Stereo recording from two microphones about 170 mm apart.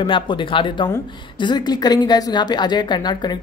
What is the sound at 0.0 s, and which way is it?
A woman's voice, 30° left (ahead or behind).